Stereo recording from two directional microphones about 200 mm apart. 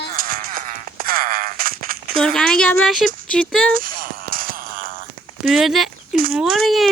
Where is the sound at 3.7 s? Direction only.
45° right (ahead or behind).